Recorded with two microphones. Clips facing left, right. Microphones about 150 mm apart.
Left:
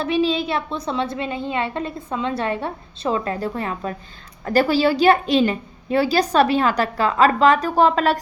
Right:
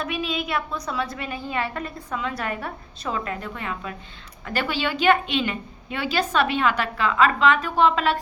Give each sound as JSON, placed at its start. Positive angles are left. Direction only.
{"t": 0.0, "sound": "a woman's voice", "side_deg": 30}